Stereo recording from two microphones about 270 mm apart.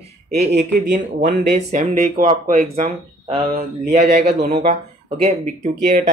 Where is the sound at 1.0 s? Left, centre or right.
Right.